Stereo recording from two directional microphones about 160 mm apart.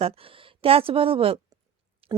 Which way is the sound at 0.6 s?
35° right (ahead or behind).